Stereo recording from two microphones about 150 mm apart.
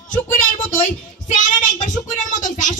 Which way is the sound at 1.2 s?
55° left (ahead or behind).